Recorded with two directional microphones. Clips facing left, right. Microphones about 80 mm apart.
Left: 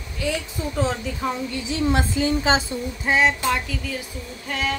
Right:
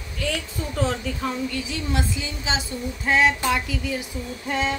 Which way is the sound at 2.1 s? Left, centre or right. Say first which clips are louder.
Left 8 dB; left.